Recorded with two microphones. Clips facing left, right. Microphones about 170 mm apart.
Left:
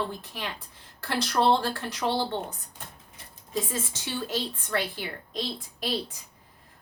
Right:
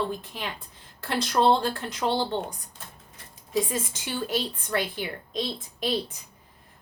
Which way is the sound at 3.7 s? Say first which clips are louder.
Right 2 dB; 15° right (ahead or behind).